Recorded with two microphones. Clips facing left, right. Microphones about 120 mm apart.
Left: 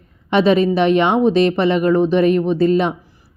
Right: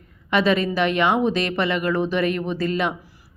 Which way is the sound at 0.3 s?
30° left (ahead or behind).